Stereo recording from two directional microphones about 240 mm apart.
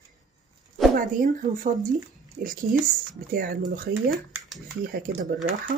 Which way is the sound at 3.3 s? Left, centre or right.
Right.